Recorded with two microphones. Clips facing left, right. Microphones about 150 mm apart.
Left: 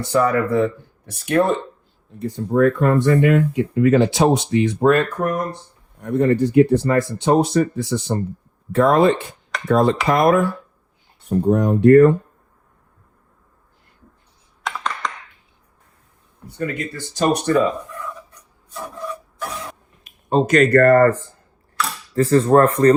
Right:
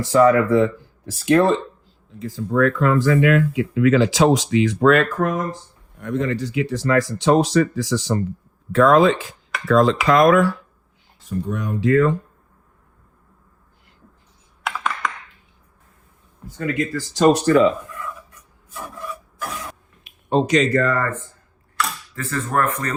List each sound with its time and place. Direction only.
0.0 s speech: 90° right
11.3 s speech: 70° left (ahead or behind)
14.6 s computer keyboard: 5° right (ahead or behind)
16.5 s speech: 90° right
17.8 s a sound: centre (ahead or behind)
18.9 s filing: 5° right (ahead or behind)
20.1 s speech: 45° left (ahead or behind)
22.1 s speech: 35° left (ahead or behind)